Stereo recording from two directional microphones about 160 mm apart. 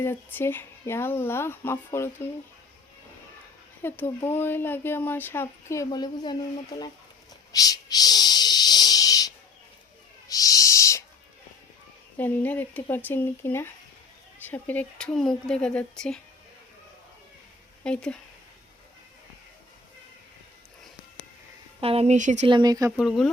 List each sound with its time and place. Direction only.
0.0 s speech: 15° left (ahead or behind)
3.8 s speech: 15° left (ahead or behind)
7.5 s owl: 25° left (ahead or behind)
12.1 s speech: 10° left (ahead or behind)
17.8 s speech: 5° left (ahead or behind)
21.8 s a woman's voice: 35° right (ahead or behind)
22.4 s speech: 25° right (ahead or behind)
23.0 s speech: centre (ahead or behind)